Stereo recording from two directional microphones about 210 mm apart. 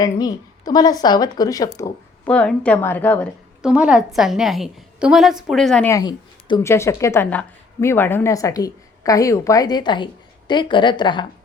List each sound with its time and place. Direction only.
0.0 s speech: 20° left (ahead or behind)
3.6 s a woman's voice: 5° right (ahead or behind)
5.9 s a woman's voice: 20° left (ahead or behind)